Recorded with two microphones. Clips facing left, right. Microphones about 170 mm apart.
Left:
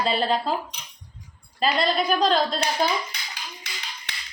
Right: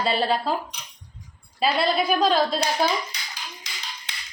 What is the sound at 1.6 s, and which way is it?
Speech, 5° right (ahead or behind).